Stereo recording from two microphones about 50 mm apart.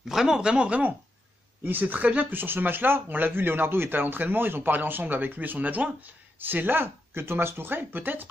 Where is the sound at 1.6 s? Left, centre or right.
Right.